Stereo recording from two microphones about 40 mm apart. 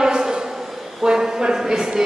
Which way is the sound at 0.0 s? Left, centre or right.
Centre.